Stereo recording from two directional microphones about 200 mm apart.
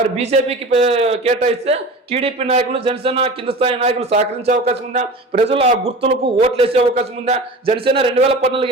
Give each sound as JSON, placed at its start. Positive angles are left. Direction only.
{"t": 0.0, "sound": "a man's voice", "side_deg": -35}